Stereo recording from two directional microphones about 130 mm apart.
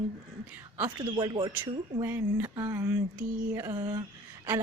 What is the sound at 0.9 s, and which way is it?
Speech, 35° right (ahead or behind).